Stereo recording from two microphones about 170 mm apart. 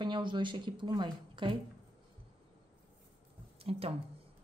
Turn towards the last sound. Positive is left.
turn(degrees=-35)  # may be behind; listen again after turning